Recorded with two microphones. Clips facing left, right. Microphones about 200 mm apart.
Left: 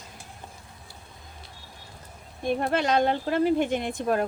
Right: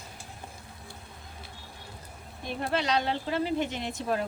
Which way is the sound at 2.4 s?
50° left (ahead or behind).